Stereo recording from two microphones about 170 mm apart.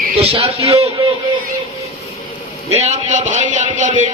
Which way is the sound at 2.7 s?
40° right (ahead or behind).